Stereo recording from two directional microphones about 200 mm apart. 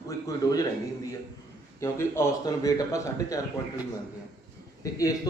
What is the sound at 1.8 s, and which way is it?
Speech, 15° left (ahead or behind).